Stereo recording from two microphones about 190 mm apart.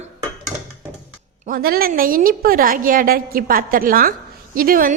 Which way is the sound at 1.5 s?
50° right (ahead or behind).